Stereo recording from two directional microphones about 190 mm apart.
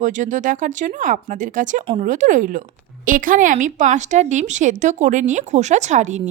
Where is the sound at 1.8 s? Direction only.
30° right (ahead or behind).